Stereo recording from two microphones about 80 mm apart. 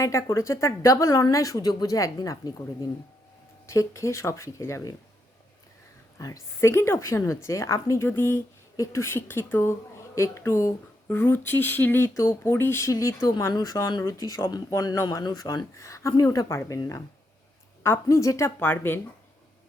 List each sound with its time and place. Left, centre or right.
0.0 s a woman's voice: left
3.7 s a woman's voice: left
6.1 s a woman's voice: left
8.0 s speech: left
8.7 s a woman's voice: left
11.1 s a woman's voice: left